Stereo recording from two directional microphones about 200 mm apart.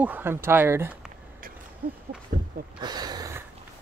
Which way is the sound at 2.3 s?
45° right (ahead or behind).